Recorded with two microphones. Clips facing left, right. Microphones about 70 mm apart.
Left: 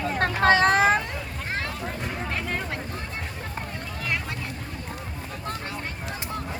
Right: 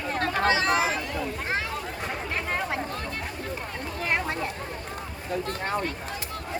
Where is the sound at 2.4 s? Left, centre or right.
Centre.